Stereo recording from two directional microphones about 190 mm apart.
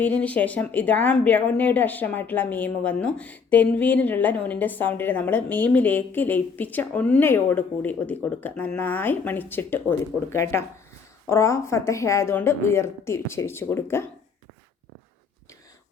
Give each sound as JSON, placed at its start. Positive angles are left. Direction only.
{"t": 0.0, "sound": "speech", "side_deg": 10}